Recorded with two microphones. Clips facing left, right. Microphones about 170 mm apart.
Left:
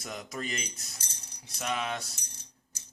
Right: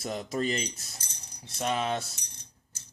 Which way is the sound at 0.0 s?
30° right (ahead or behind).